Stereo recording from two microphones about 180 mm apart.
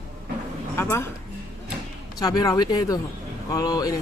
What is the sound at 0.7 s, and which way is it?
Speech, 15° left (ahead or behind).